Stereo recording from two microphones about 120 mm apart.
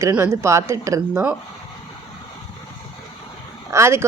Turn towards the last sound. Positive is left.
turn(degrees=-25)  # may be behind; listen again after turning